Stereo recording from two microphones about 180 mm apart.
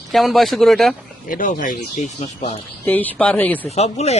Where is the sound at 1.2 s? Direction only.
50° left (ahead or behind).